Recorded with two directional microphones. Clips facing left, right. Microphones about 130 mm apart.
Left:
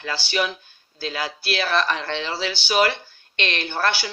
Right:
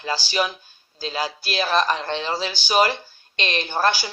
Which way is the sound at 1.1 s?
35° right (ahead or behind).